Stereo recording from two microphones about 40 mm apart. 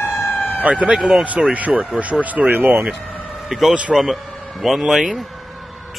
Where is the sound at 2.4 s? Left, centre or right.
Right.